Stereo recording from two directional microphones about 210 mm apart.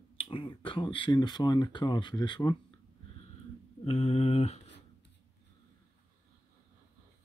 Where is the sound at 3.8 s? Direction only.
30° left (ahead or behind).